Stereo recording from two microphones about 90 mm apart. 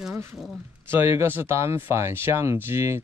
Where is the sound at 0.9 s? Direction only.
30° right (ahead or behind).